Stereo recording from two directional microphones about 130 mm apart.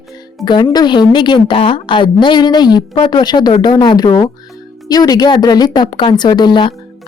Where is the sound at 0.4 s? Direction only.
35° left (ahead or behind).